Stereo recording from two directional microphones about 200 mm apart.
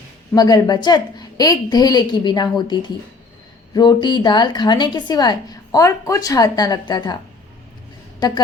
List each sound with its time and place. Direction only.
0.3 s a woman's voice: 20° left (ahead or behind)
8.2 s a woman's voice: 20° left (ahead or behind)